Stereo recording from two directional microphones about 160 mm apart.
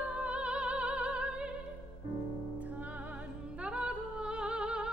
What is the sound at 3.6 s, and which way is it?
Music, 5° right (ahead or behind).